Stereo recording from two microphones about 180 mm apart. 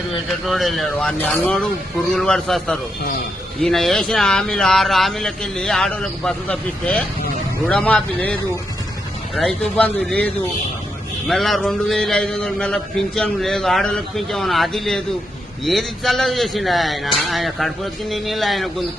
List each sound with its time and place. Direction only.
0.3 s a man's voice: centre (ahead or behind)
11.3 s a man's voice: centre (ahead or behind)